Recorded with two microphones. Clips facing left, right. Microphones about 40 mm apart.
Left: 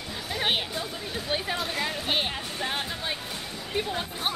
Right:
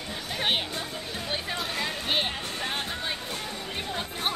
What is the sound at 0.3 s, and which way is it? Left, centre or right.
Music, centre.